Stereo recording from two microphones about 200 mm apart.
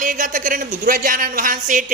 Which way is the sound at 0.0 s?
40° right (ahead or behind).